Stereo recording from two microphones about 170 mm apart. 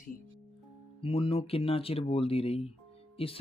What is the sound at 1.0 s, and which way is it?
Speech, 30° left (ahead or behind).